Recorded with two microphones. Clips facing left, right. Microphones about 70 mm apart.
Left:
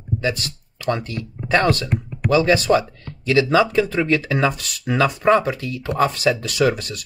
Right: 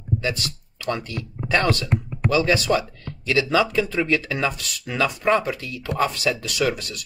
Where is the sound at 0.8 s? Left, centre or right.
Left.